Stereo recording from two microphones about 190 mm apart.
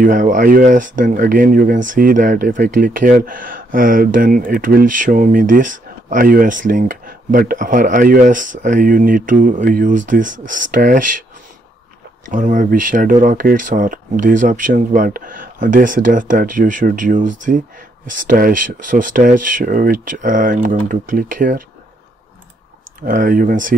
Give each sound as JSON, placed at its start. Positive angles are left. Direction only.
{"t": 0.0, "sound": "speech", "side_deg": -45}
{"t": 12.3, "sound": "speech", "side_deg": -40}
{"t": 23.0, "sound": "speech", "side_deg": -45}